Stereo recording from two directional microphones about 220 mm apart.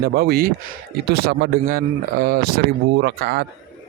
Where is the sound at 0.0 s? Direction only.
45° right (ahead or behind).